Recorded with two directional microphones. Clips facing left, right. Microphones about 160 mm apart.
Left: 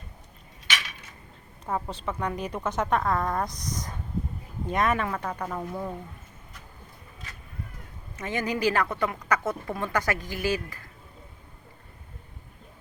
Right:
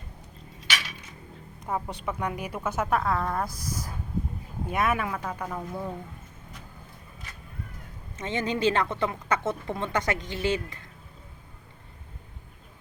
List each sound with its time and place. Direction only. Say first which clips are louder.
1.6 s speech: even; 15° right (ahead or behind)
8.2 s speech: right 1 dB; 25° right (ahead or behind)